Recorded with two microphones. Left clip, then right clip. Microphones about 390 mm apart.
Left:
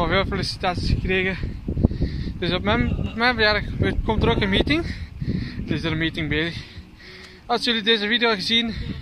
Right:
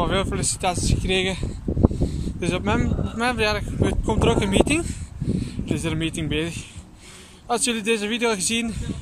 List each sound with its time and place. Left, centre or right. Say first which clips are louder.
0.0 s speech: left 2 dB; centre
1.4 s a sound: right 3 dB; right
2.4 s speech: left 2 dB; centre